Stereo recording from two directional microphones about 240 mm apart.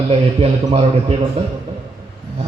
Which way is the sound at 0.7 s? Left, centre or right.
Right.